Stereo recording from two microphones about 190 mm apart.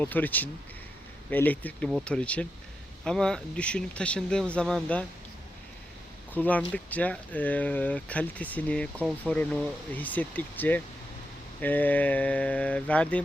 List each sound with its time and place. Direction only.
0.0 s speech: 10° left (ahead or behind)
6.3 s speech: 10° left (ahead or behind)